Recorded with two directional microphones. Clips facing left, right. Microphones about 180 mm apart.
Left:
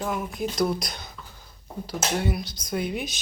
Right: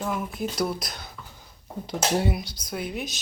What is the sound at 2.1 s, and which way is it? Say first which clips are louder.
Speech: right 2 dB; 30° right (ahead or behind).